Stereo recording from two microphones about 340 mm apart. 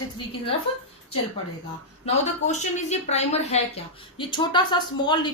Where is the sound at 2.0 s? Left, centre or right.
Centre.